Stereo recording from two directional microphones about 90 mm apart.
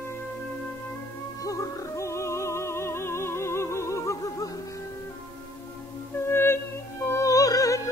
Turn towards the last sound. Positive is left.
turn(degrees=40)  # may be behind; listen again after turning